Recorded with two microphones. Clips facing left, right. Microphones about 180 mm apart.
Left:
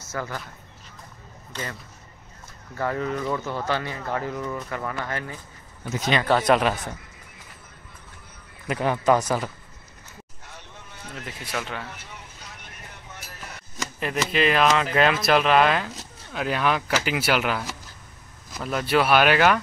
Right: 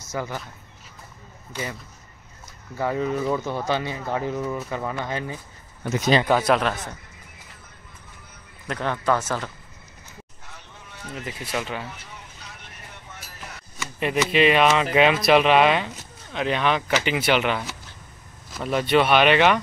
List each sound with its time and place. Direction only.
0.0 s speech: 15° right (ahead or behind)
1.5 s speech: 10° right (ahead or behind)
6.5 s speech: centre (ahead or behind)
8.6 s speech: 10° left (ahead or behind)
11.5 s speech: centre (ahead or behind)
13.9 s speech: centre (ahead or behind)